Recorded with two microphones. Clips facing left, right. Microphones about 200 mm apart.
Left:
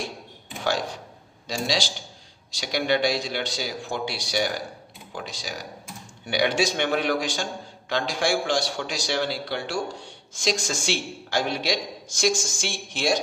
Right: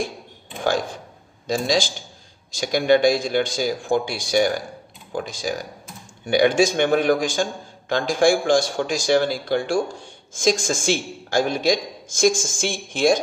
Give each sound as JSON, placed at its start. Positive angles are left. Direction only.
{"t": 0.6, "sound": "a man's voice", "side_deg": -50}